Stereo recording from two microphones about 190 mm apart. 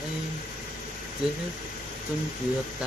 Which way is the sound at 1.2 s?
5° right (ahead or behind).